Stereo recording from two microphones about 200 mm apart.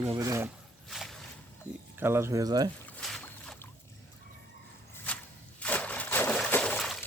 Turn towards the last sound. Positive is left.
turn(degrees=5)  # may be behind; listen again after turning